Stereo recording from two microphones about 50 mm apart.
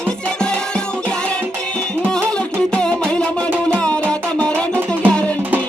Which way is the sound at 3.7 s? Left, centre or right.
Left.